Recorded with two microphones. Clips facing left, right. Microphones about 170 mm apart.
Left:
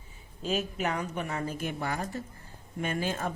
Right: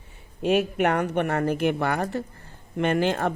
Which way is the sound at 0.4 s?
65° right (ahead or behind).